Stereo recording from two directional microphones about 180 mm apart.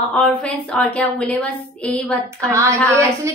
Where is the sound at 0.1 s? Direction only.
5° left (ahead or behind).